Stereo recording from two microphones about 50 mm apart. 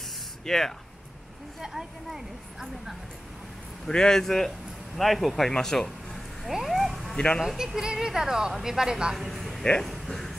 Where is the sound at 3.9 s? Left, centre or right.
Centre.